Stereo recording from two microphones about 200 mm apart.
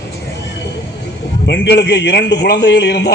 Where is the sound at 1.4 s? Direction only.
55° left (ahead or behind).